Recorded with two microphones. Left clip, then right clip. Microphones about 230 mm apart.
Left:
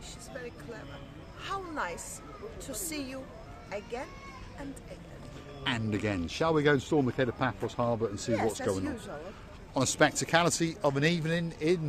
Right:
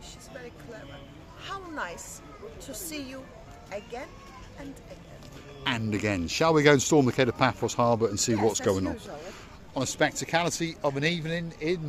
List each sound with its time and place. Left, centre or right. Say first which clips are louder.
1.4 s a sound: even; centre
2.6 s a woman's voice: even; centre
5.6 s speech: right 3 dB; right
9.7 s speech: left 1 dB; centre